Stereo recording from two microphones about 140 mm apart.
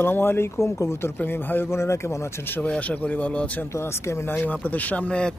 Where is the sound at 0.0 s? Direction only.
15° left (ahead or behind).